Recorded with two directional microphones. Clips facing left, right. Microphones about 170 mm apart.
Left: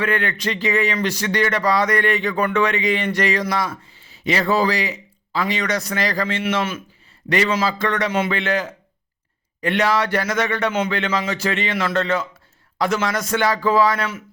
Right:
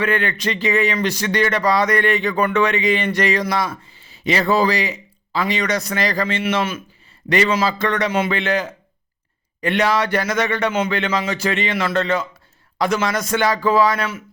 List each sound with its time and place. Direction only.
0.0 s speech: 20° right (ahead or behind)